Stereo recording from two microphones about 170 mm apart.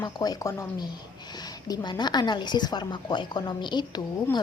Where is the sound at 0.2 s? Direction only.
20° left (ahead or behind).